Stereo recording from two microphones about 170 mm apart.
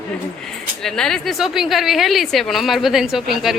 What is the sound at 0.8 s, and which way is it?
A woman's voice, 5° left (ahead or behind).